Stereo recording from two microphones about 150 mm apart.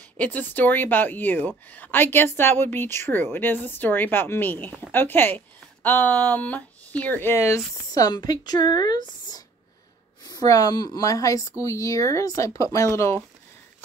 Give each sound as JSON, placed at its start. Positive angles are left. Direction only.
{"t": 0.2, "sound": "speech", "side_deg": 10}